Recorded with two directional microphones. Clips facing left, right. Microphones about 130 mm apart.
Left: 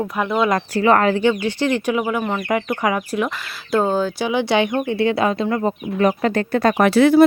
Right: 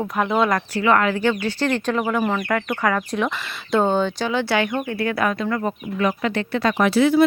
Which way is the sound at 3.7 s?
5° left (ahead or behind).